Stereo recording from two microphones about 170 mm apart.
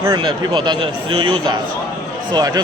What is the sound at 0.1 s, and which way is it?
A man's voice, 30° right (ahead or behind).